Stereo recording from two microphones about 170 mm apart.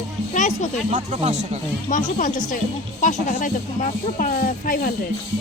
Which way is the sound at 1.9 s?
50° left (ahead or behind).